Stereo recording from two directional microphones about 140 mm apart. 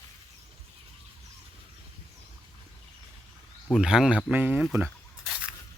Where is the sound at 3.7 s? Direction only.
5° right (ahead or behind).